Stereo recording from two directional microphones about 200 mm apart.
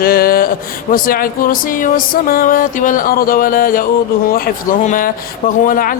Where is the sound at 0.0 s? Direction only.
50° left (ahead or behind).